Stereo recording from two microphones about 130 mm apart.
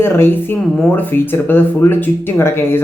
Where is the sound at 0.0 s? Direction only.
15° left (ahead or behind).